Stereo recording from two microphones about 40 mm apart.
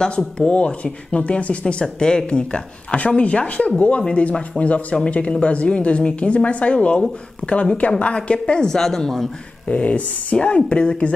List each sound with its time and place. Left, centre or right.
0.5 s speech: left
8.3 s speech: left
8.6 s a woman's voice: centre
9.7 s speech: left